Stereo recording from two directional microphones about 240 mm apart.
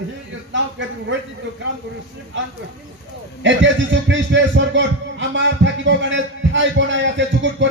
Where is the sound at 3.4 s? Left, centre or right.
Right.